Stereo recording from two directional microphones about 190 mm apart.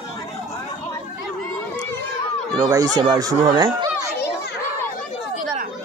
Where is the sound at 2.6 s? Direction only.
20° right (ahead or behind).